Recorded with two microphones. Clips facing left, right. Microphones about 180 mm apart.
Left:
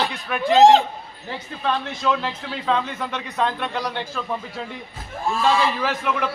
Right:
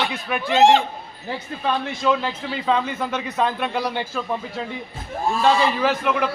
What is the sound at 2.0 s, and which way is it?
A man's voice, 5° right (ahead or behind).